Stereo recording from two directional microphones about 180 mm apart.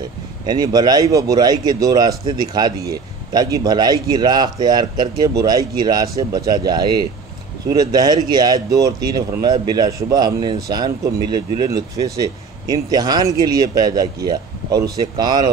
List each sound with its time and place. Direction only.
0.5 s speech: 20° right (ahead or behind)